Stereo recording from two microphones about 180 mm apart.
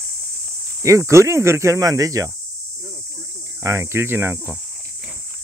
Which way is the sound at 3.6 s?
15° right (ahead or behind).